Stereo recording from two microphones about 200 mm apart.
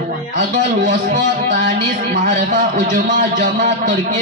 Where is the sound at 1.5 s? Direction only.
45° right (ahead or behind).